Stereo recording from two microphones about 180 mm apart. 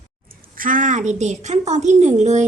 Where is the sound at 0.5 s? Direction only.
50° right (ahead or behind).